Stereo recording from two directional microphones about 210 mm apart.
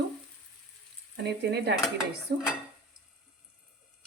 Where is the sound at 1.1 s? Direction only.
55° right (ahead or behind).